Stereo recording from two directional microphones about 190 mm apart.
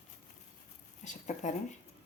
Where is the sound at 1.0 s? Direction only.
40° left (ahead or behind).